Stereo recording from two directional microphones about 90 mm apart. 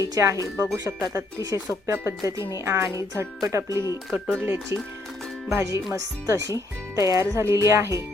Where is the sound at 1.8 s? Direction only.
25° right (ahead or behind).